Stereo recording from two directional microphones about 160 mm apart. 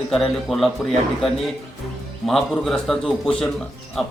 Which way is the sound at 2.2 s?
Centre (ahead or behind).